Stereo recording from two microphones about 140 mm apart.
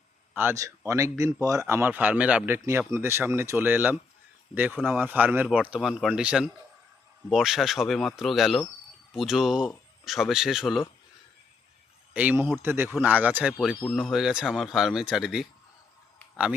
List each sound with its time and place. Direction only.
0.3 s speech: 20° right (ahead or behind); by 10.8 s centre (ahead or behind)
12.1 s speech: 10° right (ahead or behind)